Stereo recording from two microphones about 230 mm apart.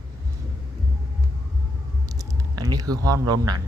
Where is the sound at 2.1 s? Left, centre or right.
Centre.